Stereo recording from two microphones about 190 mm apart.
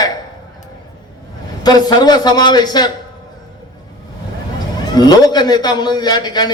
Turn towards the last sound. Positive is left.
turn(degrees=20)  # may be behind; listen again after turning